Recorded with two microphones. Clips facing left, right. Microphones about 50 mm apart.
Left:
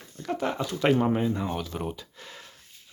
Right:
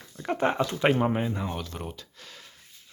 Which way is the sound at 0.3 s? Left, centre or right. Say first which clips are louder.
Right 3 dB; right.